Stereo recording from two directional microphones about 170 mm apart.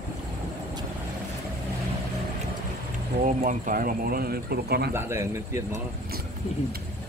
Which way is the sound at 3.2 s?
50° right (ahead or behind).